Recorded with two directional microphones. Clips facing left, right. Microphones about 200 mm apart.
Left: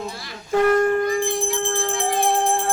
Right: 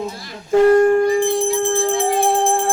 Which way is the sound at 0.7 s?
30° right (ahead or behind).